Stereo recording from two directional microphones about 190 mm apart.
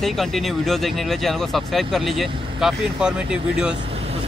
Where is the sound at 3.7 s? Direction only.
30° right (ahead or behind).